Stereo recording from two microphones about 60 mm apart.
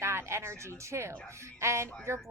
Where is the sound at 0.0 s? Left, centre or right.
Right.